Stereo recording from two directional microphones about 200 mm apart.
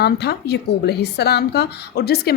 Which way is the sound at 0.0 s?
55° left (ahead or behind).